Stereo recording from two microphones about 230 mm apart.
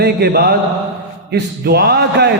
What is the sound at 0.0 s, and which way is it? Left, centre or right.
A man's voice, right.